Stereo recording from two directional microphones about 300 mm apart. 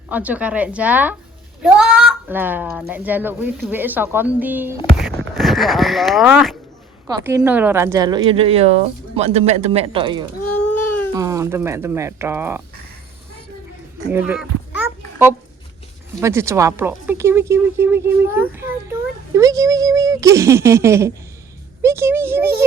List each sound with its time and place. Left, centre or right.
0.1 s speech: centre
14.1 s speech: centre
14.8 s babbling: centre
16.2 s a child's voice: centre